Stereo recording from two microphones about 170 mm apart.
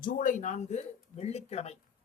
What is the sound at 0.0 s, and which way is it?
Speech, 50° left (ahead or behind).